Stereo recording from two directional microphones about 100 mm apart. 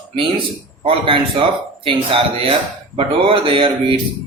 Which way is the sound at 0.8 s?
60° right (ahead or behind).